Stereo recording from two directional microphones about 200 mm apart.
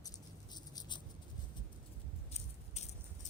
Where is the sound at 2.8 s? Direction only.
35° left (ahead or behind).